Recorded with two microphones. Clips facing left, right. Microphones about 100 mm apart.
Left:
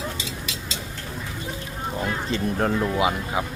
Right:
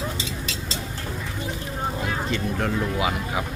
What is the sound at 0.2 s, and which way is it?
Vehicle, 35° right (ahead or behind).